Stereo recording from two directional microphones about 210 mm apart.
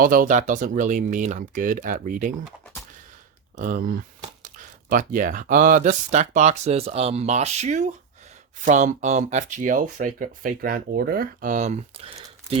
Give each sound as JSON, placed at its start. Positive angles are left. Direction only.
{"t": 0.0, "sound": "speech", "side_deg": -40}
{"t": 3.6, "sound": "speech", "side_deg": -40}